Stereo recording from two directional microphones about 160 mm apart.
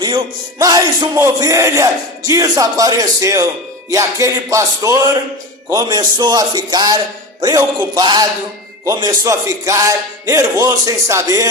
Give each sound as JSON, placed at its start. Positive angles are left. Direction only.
{"t": 0.6, "sound": "speech", "side_deg": -25}